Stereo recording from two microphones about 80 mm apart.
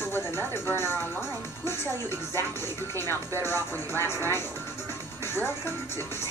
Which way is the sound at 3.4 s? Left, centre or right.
Left.